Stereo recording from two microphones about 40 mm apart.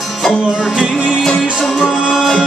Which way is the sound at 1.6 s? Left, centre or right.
Centre.